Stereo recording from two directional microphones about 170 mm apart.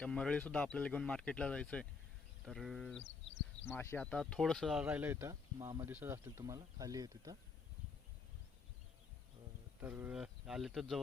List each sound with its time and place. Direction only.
0.0 s speech: 5° left (ahead or behind)
3.7 s speech: 15° left (ahead or behind); by 7.3 s 20° right (ahead or behind)
9.8 s speech: 10° right (ahead or behind)